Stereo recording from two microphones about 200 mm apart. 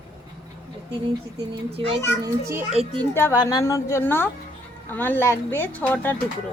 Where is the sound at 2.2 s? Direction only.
15° right (ahead or behind).